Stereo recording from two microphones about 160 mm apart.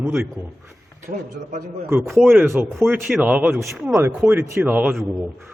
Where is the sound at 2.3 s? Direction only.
5° right (ahead or behind).